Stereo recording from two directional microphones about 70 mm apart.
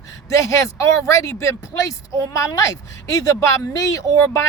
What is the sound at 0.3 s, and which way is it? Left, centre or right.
Speech, left.